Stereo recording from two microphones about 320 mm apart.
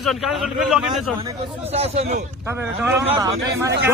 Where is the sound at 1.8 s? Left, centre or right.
Centre.